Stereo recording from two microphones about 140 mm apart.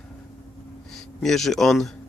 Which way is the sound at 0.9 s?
5° left (ahead or behind).